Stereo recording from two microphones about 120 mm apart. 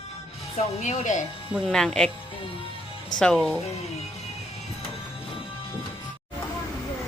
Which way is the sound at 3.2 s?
5° left (ahead or behind).